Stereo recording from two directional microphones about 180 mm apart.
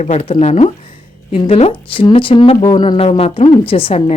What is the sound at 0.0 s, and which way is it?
A woman's voice, 35° left (ahead or behind).